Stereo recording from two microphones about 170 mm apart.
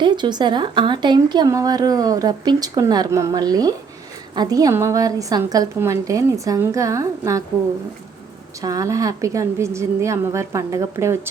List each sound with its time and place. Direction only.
0.0 s speech: 25° right (ahead or behind)
8.6 s speech: 20° right (ahead or behind)